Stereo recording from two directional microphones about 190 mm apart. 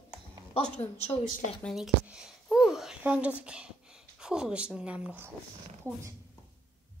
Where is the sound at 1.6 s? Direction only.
Centre (ahead or behind).